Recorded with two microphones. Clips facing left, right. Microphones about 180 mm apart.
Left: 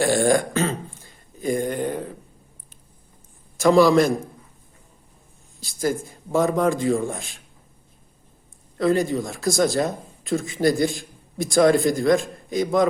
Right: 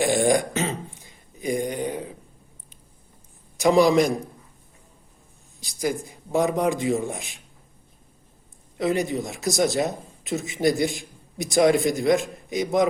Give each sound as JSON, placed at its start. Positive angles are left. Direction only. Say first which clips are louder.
{"t": 0.0, "sound": "throat clearing", "louder": "left 1 dB", "side_deg": -15}
{"t": 0.9, "sound": "a sound", "louder": "left 2 dB", "side_deg": -15}
{"t": 1.8, "sound": "a man's voice", "louder": "left 2 dB", "side_deg": -10}
{"t": 3.6, "sound": "a man's voice", "louder": "left 2 dB", "side_deg": -20}
{"t": 5.5, "sound": "speech", "louder": "left 2 dB", "side_deg": -15}
{"t": 8.8, "sound": "speech", "louder": "left 3 dB", "side_deg": -20}